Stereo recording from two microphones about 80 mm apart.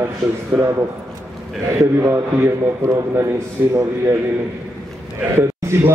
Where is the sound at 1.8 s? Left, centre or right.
Right.